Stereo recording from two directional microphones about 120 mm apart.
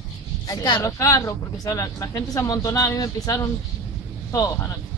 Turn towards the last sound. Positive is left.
turn(degrees=30)  # may be behind; listen again after turning